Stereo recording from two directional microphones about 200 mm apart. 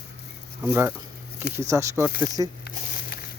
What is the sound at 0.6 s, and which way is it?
Speech, 10° right (ahead or behind).